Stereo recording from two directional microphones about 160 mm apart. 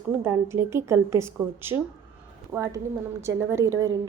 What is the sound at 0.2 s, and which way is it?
A woman's voice, 15° right (ahead or behind).